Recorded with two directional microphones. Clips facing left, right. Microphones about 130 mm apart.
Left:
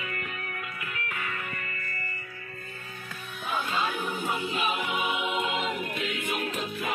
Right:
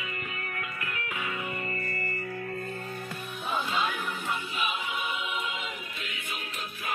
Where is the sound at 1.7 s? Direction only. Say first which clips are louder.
Right 5 dB; 35° right (ahead or behind).